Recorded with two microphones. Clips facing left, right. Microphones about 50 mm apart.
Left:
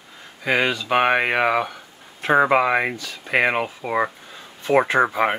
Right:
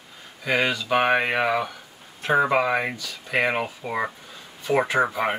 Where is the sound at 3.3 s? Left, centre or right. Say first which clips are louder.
Left 3 dB; centre.